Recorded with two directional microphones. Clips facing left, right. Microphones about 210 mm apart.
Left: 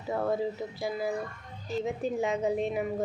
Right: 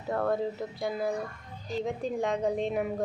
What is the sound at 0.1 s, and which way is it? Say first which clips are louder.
A woman's voice: even; 5° left (ahead or behind).